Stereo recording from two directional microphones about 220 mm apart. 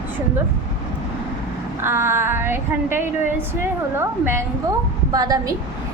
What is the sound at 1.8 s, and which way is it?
A woman's voice, 10° right (ahead or behind).